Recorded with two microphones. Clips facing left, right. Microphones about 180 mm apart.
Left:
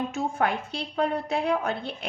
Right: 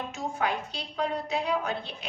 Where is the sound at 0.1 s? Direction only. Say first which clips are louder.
Left 4 dB; 55° left (ahead or behind).